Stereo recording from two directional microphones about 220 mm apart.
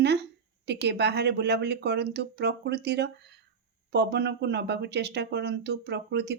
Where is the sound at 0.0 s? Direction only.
50° right (ahead or behind).